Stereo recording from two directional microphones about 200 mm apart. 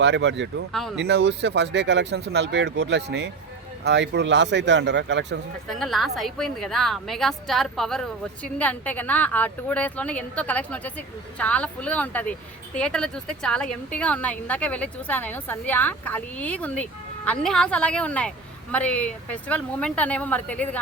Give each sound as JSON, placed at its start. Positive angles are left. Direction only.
{"t": 0.0, "sound": "speech", "side_deg": -60}
{"t": 0.7, "sound": "a woman's voice", "side_deg": 0}
{"t": 0.9, "sound": "speech", "side_deg": -60}
{"t": 5.6, "sound": "a woman's voice", "side_deg": 0}